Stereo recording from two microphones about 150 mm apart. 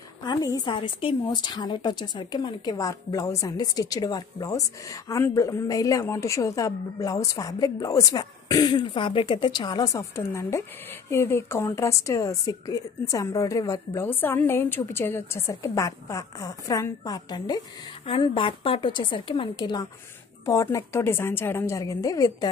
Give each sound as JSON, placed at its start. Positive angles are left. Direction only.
{"t": 0.2, "sound": "a woman's voice", "side_deg": 30}